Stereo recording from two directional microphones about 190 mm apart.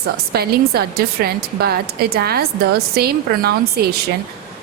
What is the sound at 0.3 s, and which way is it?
A woman's voice, 55° right (ahead or behind).